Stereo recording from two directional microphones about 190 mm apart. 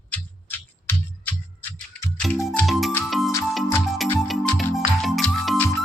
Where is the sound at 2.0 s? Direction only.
5° left (ahead or behind).